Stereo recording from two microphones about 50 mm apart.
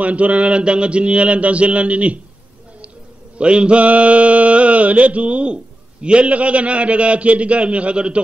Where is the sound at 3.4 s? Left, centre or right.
Right.